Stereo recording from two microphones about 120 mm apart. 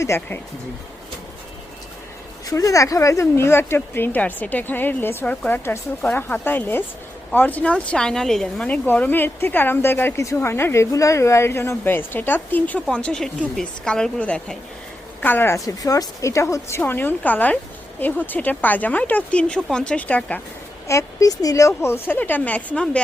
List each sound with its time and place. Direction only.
0.0 s speech: 25° left (ahead or behind)
2.5 s a woman's voice: 25° left (ahead or behind); by 20.4 s 10° left (ahead or behind)
20.8 s a woman's voice: 25° left (ahead or behind); by 23.0 s 10° left (ahead or behind)